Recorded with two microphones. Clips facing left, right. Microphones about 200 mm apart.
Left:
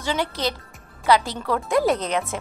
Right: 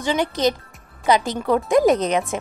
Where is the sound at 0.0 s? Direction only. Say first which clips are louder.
Right 5 dB; 15° right (ahead or behind).